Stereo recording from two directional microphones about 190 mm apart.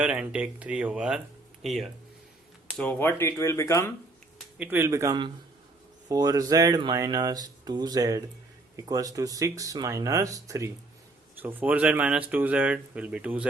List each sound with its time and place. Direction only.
0.0 s speech: 5° right (ahead or behind); by 3.9 s 15° left (ahead or behind)
4.5 s speech: 10° right (ahead or behind)